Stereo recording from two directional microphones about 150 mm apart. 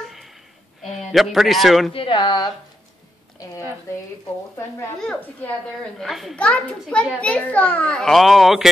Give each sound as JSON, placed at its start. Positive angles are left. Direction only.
{"t": 0.8, "sound": "a man's voice", "side_deg": 0}
{"t": 2.0, "sound": "speech", "side_deg": 30}
{"t": 5.9, "sound": "a child's voice", "side_deg": 0}